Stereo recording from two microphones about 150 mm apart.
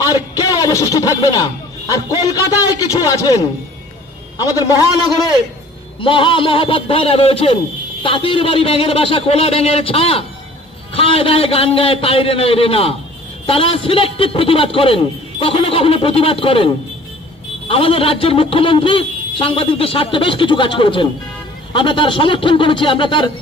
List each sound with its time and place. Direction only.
0.1 s a man's voice: 25° left (ahead or behind)
5.9 s speech: 35° left (ahead or behind)